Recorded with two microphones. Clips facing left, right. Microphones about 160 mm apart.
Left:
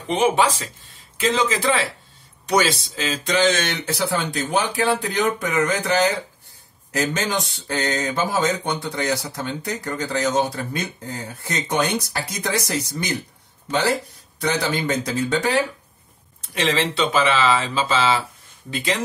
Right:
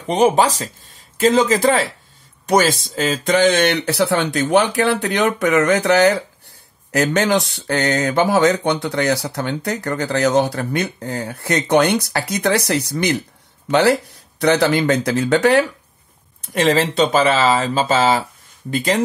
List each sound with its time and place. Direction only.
0.1 s speech: 40° right (ahead or behind); by 15.6 s 70° right (ahead or behind)
16.3 s speech: 50° right (ahead or behind)